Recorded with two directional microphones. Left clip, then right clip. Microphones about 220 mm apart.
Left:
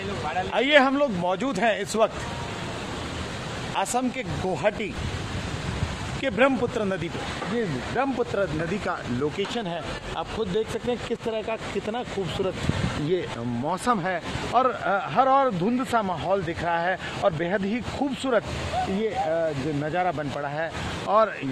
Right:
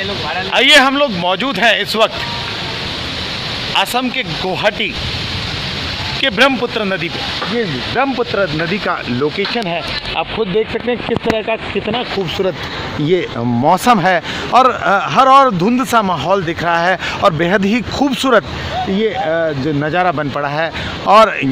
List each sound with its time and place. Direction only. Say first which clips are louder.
0.5 s speech: right 11 dB; centre (ahead or behind)
6.2 s speech: right 9 dB; centre (ahead or behind)
7.9 s speech: right 10 dB; 25° right (ahead or behind)
13.7 s speech: right 14 dB; 40° right (ahead or behind)